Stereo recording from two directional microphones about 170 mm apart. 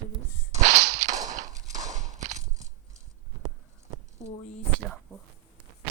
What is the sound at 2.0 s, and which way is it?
Walk, 45° right (ahead or behind).